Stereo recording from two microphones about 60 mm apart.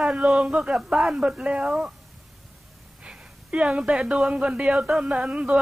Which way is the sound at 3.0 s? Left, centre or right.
Centre.